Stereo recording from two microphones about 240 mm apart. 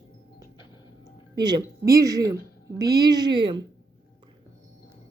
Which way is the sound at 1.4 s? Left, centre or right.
Centre.